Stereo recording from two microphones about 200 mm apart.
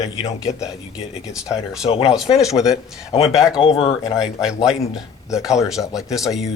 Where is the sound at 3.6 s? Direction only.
30° left (ahead or behind).